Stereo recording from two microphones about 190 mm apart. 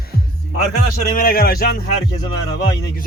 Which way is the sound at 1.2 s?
50° left (ahead or behind).